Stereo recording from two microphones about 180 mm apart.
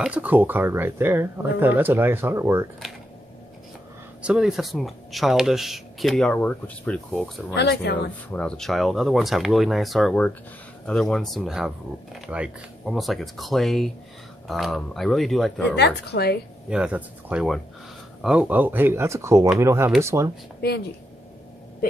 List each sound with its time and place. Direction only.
0.0 s speech: 10° right (ahead or behind)
4.2 s speech: 5° right (ahead or behind)
7.5 s speech: 65° left (ahead or behind)
8.3 s speech: 5° left (ahead or behind)
15.7 s speech: 65° left (ahead or behind)
16.6 s speech: 5° right (ahead or behind)
20.6 s speech: 65° left (ahead or behind)